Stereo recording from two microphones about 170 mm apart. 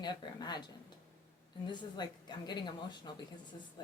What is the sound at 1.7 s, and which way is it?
Speech, 25° left (ahead or behind).